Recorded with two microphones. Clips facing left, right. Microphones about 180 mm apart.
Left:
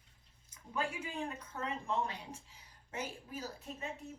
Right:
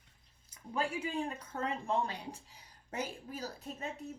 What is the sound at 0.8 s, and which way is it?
Speech, 30° right (ahead or behind).